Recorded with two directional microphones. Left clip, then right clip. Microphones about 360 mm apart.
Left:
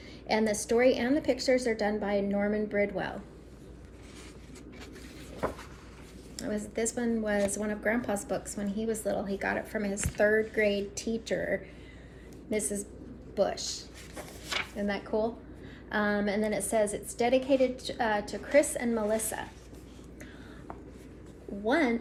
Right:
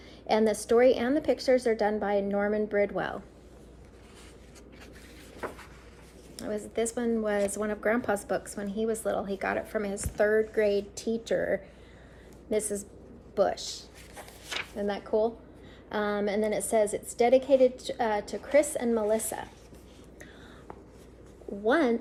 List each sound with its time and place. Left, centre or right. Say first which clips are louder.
0.3 s speech: right 3 dB; centre
6.3 s speech: right 2 dB; centre
14.2 s a sound: left 2 dB; centre
14.8 s speech: right 5 dB; centre
21.7 s speech: right 2 dB; centre